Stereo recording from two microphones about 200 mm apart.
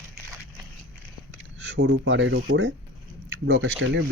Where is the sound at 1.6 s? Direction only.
65° right (ahead or behind).